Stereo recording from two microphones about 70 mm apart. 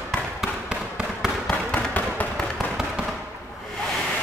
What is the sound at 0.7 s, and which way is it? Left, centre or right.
Fireworks, centre.